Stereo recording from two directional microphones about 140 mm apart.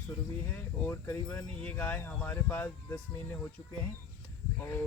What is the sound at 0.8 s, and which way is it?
Speech, 15° left (ahead or behind).